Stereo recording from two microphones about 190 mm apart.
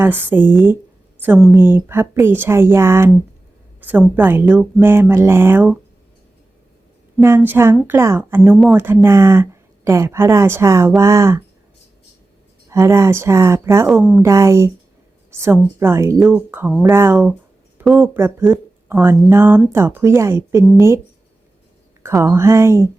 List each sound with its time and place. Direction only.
0.0 s a woman's voice: 10° right (ahead or behind)
7.2 s a woman's voice: 15° right (ahead or behind)
12.6 s a woman's voice: 15° right (ahead or behind)
13.8 s speech: 5° right (ahead or behind)
14.3 s a woman's voice: 15° right (ahead or behind)
22.2 s a woman's voice: 15° right (ahead or behind)